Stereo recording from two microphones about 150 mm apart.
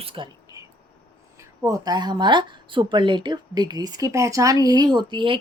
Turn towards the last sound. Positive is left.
turn(degrees=-30)  # may be behind; listen again after turning